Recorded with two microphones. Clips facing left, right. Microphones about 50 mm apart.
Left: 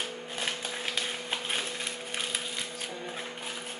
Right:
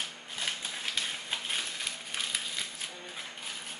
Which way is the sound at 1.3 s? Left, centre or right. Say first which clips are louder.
Left 2 dB; centre.